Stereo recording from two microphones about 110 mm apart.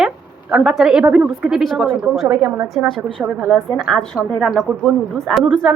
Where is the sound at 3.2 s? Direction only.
10° right (ahead or behind).